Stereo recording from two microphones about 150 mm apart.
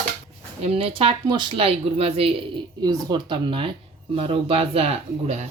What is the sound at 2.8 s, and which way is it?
Speech, 30° right (ahead or behind).